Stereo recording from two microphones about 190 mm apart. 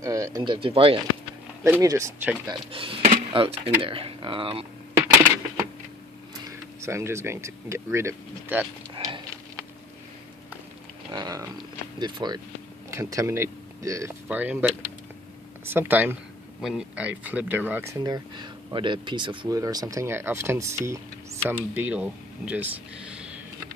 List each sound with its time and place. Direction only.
0.0 s speech: 15° right (ahead or behind)
1.6 s speech: 15° right (ahead or behind)
2.7 s speech: 30° right (ahead or behind)
6.3 s speech: 15° right (ahead or behind)
8.9 s a sound: 25° right (ahead or behind)
11.1 s speech: 20° right (ahead or behind)
18.0 s speech: 20° right (ahead or behind); by 23.4 s 5° right (ahead or behind)